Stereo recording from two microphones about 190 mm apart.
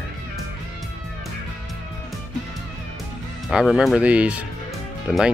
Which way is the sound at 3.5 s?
Centre (ahead or behind).